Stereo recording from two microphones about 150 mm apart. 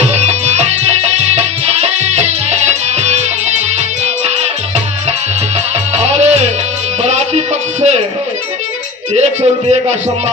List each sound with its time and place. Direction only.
0.1 s music: 50° right (ahead or behind)
5.9 s music: 45° right (ahead or behind)
9.1 s music: 45° right (ahead or behind)